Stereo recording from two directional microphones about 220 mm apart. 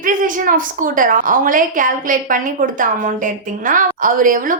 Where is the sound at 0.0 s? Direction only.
35° right (ahead or behind).